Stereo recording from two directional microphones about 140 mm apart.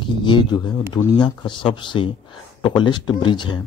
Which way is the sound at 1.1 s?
35° left (ahead or behind).